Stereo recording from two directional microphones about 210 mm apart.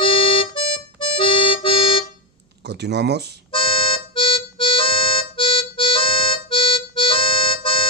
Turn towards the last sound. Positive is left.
turn(degrees=25)  # may be behind; listen again after turning